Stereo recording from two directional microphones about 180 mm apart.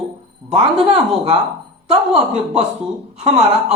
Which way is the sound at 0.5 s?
30° right (ahead or behind).